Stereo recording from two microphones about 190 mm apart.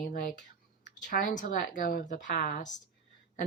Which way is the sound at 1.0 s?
45° left (ahead or behind).